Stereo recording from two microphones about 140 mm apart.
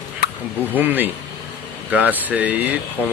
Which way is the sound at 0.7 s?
10° right (ahead or behind).